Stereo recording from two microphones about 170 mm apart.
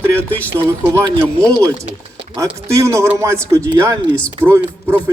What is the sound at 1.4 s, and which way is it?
Speech, 5° left (ahead or behind).